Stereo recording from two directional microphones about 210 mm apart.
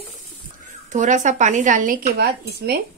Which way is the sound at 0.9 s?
35° right (ahead or behind).